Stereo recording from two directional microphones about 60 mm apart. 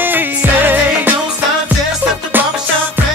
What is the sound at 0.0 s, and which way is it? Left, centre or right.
Music, right.